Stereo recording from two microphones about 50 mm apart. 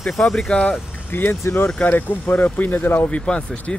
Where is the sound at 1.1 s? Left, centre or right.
Left.